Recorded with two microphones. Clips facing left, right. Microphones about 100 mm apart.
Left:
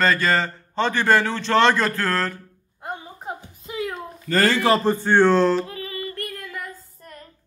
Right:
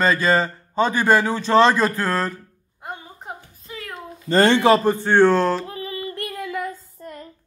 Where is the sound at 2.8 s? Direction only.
Centre (ahead or behind).